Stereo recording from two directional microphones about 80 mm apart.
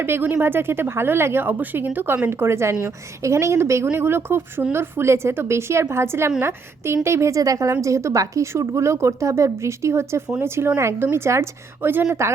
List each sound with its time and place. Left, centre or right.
0.0 s a woman's voice: right